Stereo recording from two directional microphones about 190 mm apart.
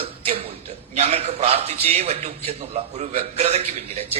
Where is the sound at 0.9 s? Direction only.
35° right (ahead or behind).